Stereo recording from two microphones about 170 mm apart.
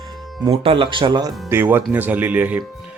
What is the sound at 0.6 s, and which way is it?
Speech, 30° right (ahead or behind).